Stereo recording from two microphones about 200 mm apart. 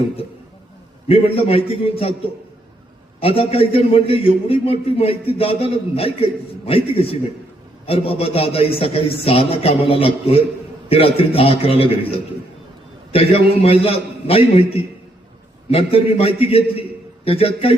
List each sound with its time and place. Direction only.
1.0 s speech: 30° left (ahead or behind)
3.2 s speech: 30° left (ahead or behind)
13.1 s speech: 30° left (ahead or behind)